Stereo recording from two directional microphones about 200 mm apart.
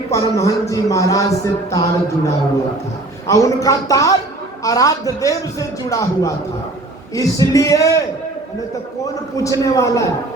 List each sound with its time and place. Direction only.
0.1 s a man's voice: 15° left (ahead or behind)
9.3 s a man's voice: 15° left (ahead or behind)